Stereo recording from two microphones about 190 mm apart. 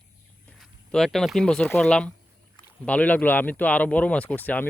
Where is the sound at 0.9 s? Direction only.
Centre (ahead or behind).